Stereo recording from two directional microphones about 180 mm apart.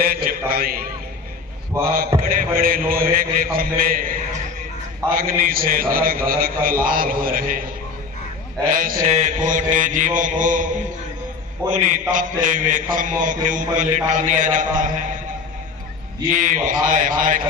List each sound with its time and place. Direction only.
0.0 s a man's voice: 55° right (ahead or behind)
8.7 s a man's voice: 50° right (ahead or behind)
11.7 s a man's voice: 45° right (ahead or behind)
16.3 s a man's voice: 45° right (ahead or behind)